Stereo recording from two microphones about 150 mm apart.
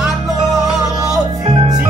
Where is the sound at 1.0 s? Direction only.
25° right (ahead or behind).